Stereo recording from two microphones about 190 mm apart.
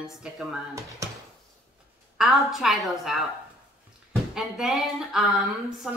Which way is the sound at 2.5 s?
Centre (ahead or behind).